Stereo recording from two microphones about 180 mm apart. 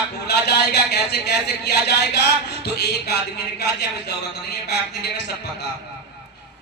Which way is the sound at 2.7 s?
65° left (ahead or behind).